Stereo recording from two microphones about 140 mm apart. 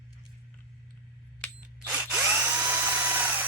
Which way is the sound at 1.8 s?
10° right (ahead or behind).